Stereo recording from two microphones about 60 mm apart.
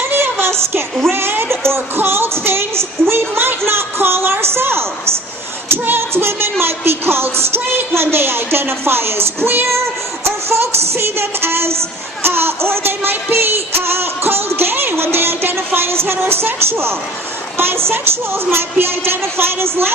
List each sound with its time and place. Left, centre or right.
0.1 s child singing: right
1.1 s music: right
3.7 s a sound: right
5.6 s music: right